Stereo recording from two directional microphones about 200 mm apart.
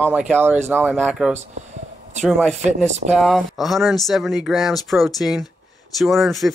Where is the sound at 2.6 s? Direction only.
35° right (ahead or behind).